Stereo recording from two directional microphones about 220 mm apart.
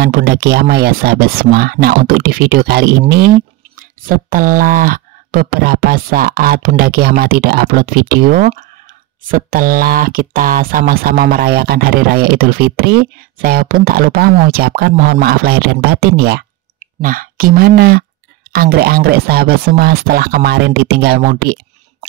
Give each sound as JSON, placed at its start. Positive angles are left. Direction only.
{"t": 0.0, "sound": "speech", "side_deg": -45}